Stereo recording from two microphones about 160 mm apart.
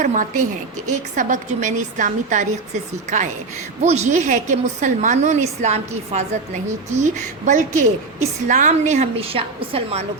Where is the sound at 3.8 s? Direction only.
45° right (ahead or behind).